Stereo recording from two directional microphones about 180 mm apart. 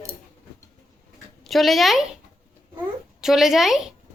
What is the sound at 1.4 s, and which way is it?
Speech, centre (ahead or behind).